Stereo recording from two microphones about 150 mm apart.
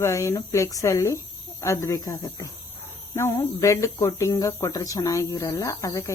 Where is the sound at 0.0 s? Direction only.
20° left (ahead or behind).